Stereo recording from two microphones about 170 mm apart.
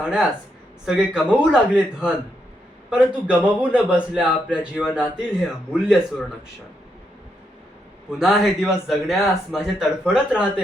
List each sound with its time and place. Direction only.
0.0 s a man's voice: 5° right (ahead or behind)
8.2 s speech: 5° right (ahead or behind)